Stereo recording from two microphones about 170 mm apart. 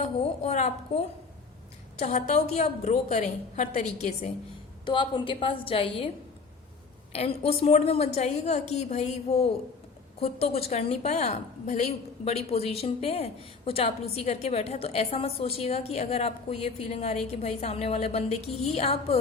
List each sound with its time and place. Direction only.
0.0 s a woman's voice: 40° left (ahead or behind)
4.9 s a woman's voice: 30° left (ahead or behind)
7.1 s a woman's voice: 35° left (ahead or behind)